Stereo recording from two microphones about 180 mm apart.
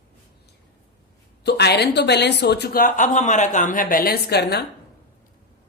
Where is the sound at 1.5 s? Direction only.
65° left (ahead or behind).